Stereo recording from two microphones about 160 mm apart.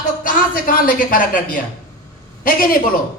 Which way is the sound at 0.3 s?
60° left (ahead or behind).